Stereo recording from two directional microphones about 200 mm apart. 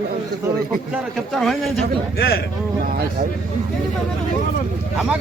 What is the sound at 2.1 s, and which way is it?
Speech, 50° left (ahead or behind).